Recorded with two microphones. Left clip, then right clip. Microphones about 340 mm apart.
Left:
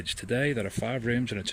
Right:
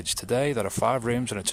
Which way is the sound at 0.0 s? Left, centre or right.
Centre.